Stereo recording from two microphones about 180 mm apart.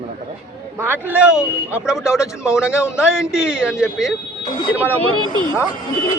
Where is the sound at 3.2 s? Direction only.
5° right (ahead or behind).